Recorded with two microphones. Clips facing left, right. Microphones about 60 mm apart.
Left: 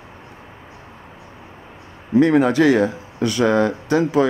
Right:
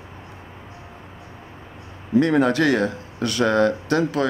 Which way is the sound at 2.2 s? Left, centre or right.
Centre.